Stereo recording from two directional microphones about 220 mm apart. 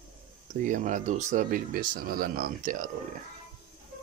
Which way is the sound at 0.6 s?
35° right (ahead or behind).